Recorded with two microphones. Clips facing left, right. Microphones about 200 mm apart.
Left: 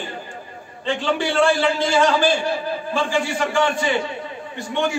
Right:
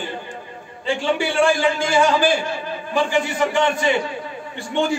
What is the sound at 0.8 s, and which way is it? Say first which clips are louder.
A man's voice: right 1 dB; 10° right (ahead or behind).